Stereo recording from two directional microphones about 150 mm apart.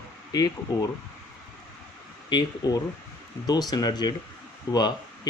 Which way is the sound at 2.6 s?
25° left (ahead or behind).